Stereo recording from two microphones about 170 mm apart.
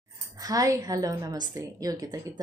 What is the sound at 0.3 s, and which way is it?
A woman's voice, 20° right (ahead or behind).